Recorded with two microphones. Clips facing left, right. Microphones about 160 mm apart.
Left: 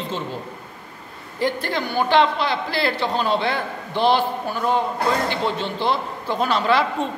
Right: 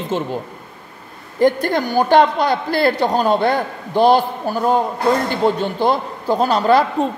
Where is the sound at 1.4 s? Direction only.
50° right (ahead or behind).